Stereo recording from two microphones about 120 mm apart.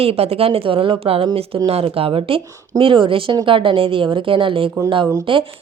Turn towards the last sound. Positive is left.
turn(degrees=-35)  # may be behind; listen again after turning